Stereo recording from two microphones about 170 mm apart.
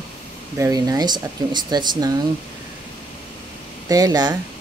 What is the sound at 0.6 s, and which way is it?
A woman's voice, 20° right (ahead or behind).